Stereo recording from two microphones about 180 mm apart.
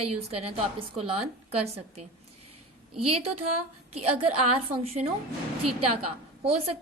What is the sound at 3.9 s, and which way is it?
A woman's voice, 35° right (ahead or behind).